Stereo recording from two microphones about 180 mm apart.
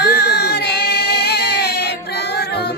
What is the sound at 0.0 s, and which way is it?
Music, 65° left (ahead or behind).